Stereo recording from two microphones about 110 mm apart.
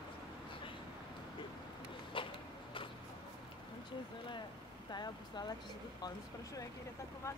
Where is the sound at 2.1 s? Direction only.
50° left (ahead or behind).